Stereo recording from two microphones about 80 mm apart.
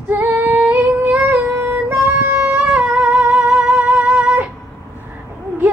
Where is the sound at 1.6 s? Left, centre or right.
Right.